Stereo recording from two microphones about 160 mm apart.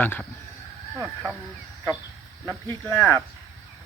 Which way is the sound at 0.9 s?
10° right (ahead or behind).